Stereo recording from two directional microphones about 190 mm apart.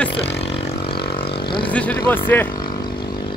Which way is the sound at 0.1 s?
65° left (ahead or behind).